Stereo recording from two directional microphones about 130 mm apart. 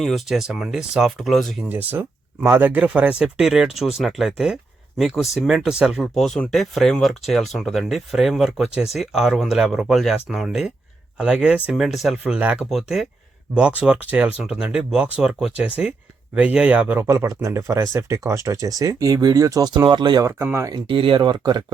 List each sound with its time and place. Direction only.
0.0 s speech: centre (ahead or behind)
1.7 s speech: 15° right (ahead or behind); by 20.2 s 35° right (ahead or behind)
20.2 s speech: 20° right (ahead or behind)
20.8 s speech: 40° right (ahead or behind)